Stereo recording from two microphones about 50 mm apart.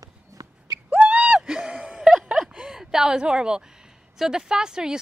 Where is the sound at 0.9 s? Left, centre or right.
Right.